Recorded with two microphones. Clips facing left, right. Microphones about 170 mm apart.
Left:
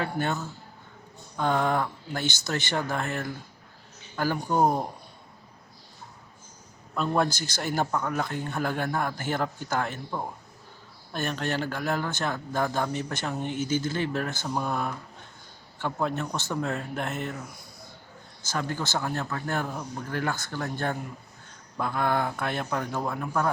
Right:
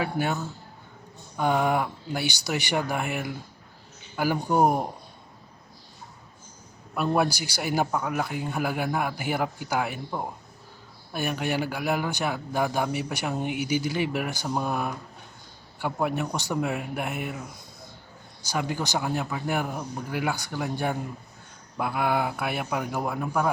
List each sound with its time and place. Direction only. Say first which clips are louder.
0.0 s a man's voice: right 1 dB; 10° right (ahead or behind)
6.9 s a man's voice: right 2 dB; 10° right (ahead or behind)